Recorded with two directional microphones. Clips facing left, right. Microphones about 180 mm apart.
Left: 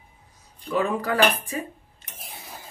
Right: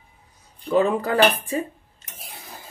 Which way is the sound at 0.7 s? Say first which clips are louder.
Right 4 dB; 35° right (ahead or behind).